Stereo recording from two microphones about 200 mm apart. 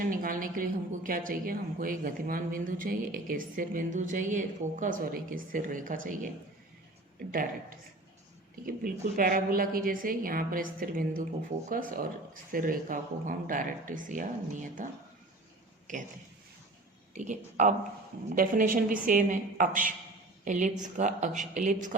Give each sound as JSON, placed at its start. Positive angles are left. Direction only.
{"t": 0.0, "sound": "a woman's voice", "side_deg": -45}
{"t": 17.2, "sound": "a woman's voice", "side_deg": -40}